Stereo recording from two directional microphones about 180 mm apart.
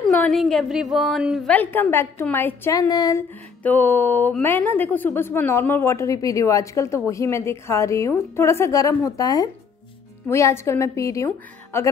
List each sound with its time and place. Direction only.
0.0 s a woman's voice: centre (ahead or behind); by 3.3 s 20° left (ahead or behind)
3.6 s a woman's voice: 10° left (ahead or behind)